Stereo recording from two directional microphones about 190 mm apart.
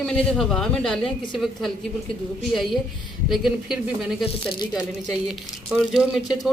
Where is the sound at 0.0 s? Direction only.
5° left (ahead or behind).